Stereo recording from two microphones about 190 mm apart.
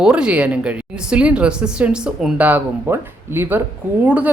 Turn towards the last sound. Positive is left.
turn(degrees=-10)  # may be behind; listen again after turning